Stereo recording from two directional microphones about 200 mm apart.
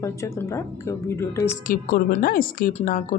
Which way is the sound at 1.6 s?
45° left (ahead or behind).